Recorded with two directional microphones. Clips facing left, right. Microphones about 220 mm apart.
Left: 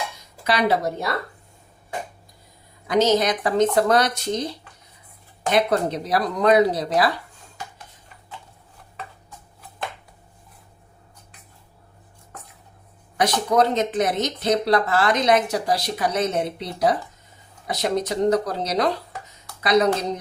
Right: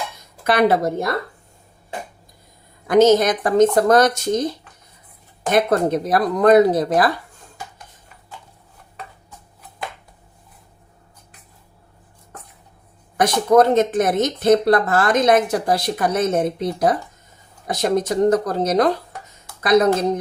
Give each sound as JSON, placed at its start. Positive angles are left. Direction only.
{"t": 0.4, "sound": "speech", "side_deg": -50}
{"t": 2.8, "sound": "speech", "side_deg": -50}
{"t": 5.5, "sound": "speech", "side_deg": -50}
{"t": 13.1, "sound": "speech", "side_deg": -50}